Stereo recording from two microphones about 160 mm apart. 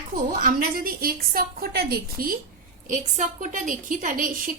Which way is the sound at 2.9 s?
50° right (ahead or behind).